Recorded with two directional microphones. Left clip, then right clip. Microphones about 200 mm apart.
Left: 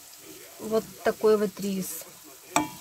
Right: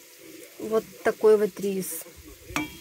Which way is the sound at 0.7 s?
5° right (ahead or behind).